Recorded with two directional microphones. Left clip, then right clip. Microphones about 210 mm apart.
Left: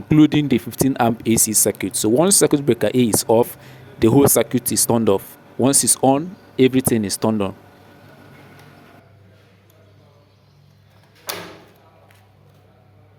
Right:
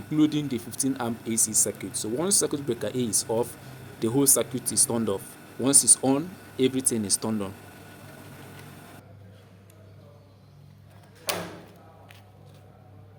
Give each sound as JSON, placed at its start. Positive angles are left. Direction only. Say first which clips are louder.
{"t": 0.1, "sound": "speech", "louder": "left 10 dB", "side_deg": 40}